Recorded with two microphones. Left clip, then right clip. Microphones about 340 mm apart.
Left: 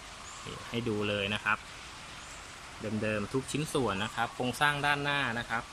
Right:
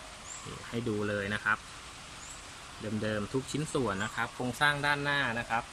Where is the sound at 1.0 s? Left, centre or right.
Centre.